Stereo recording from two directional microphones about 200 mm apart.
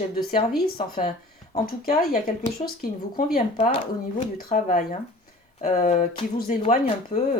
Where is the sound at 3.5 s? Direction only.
30° left (ahead or behind).